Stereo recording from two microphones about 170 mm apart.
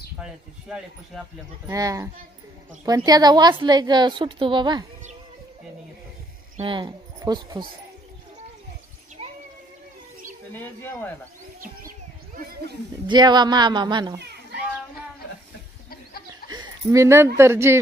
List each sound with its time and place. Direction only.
0.2 s speech: 5° right (ahead or behind)
1.7 s a woman's voice: 20° right (ahead or behind)
3.1 s a woman's voice: 25° right (ahead or behind)
6.5 s a woman's voice: 30° right (ahead or behind)
9.2 s a sound: 35° right (ahead or behind)
10.5 s speech: 10° left (ahead or behind)
13.0 s a woman's voice: 25° right (ahead or behind)
14.1 s a sound: 75° right (ahead or behind)
16.4 s speech: 25° right (ahead or behind)